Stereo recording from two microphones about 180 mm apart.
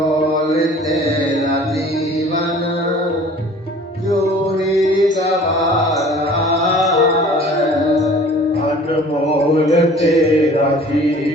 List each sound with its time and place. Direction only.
6.7 s music: centre (ahead or behind)
9.5 s a sound: 40° left (ahead or behind)
10.0 s mantra: centre (ahead or behind)